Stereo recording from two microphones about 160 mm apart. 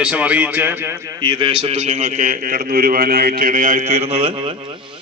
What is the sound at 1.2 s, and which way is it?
A man's voice, 35° right (ahead or behind).